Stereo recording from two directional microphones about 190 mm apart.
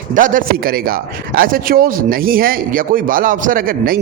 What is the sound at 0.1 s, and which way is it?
Speech, 45° right (ahead or behind).